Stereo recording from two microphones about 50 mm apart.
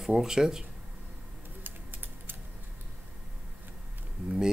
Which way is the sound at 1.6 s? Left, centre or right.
Right.